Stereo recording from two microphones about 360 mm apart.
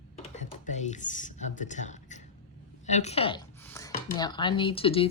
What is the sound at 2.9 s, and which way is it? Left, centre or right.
Speech, centre.